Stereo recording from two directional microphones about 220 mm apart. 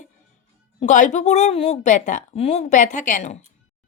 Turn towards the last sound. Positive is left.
turn(degrees=30)  # may be behind; listen again after turning